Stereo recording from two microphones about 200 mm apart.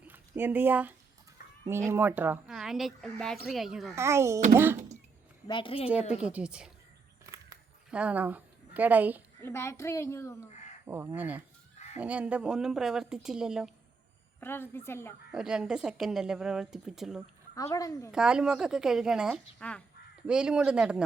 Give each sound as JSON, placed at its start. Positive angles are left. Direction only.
{"t": 0.1, "sound": "speech", "side_deg": -10}
{"t": 3.9, "sound": "speech", "side_deg": -15}
{"t": 5.5, "sound": "a woman's voice", "side_deg": 25}
{"t": 5.9, "sound": "speech", "side_deg": -5}
{"t": 7.9, "sound": "a woman's voice", "side_deg": -5}
{"t": 9.4, "sound": "a woman's voice", "side_deg": 15}
{"t": 10.8, "sound": "speech", "side_deg": -10}
{"t": 14.4, "sound": "a woman's voice", "side_deg": 10}
{"t": 15.3, "sound": "speech", "side_deg": -5}
{"t": 17.5, "sound": "a woman's voice", "side_deg": 15}
{"t": 18.1, "sound": "speech", "side_deg": -5}